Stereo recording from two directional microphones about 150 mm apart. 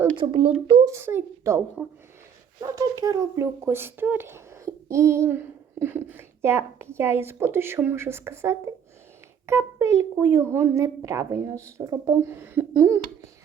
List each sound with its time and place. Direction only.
0.2 s speech: 35° right (ahead or behind)
0.9 s speech: 15° right (ahead or behind)
2.7 s speech: 25° right (ahead or behind)